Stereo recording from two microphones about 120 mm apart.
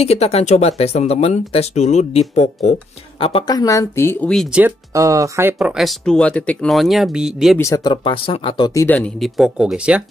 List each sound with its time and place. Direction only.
0.0 s speech: 60° left (ahead or behind)
3.2 s a woman's voice: 50° left (ahead or behind)
3.4 s speech: 30° left (ahead or behind)
4.5 s speech: 10° right (ahead or behind)
4.9 s speech: 25° right (ahead or behind)
5.7 s speech: centre (ahead or behind)
6.7 s speech: centre (ahead or behind)
7.5 s speech: 25° left (ahead or behind); by 8.7 s 40° left (ahead or behind)
8.7 s speech: 15° left (ahead or behind)
9.2 s speech: 5° right (ahead or behind)